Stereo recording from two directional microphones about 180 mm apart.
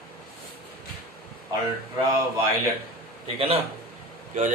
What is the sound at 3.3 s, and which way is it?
Speech, 30° right (ahead or behind).